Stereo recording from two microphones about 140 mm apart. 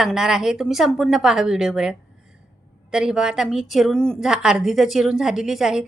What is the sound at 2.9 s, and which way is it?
A woman's voice, 5° right (ahead or behind).